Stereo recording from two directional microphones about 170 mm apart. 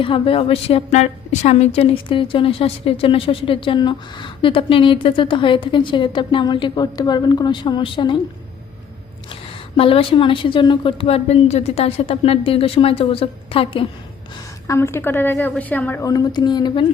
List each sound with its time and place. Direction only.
0.0 s a woman's voice: 30° left (ahead or behind)
9.3 s a woman's voice: 35° left (ahead or behind)
14.7 s a woman's voice: 15° left (ahead or behind)